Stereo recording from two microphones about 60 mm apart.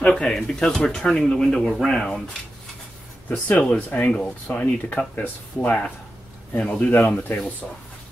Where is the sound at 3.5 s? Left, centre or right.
Left.